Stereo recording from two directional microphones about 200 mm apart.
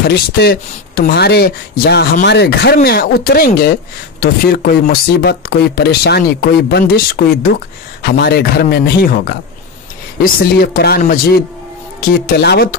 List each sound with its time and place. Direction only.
0.0 s speech: 55° left (ahead or behind)